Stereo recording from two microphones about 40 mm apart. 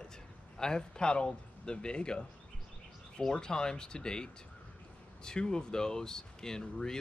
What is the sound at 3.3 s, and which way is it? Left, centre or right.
Speech, centre.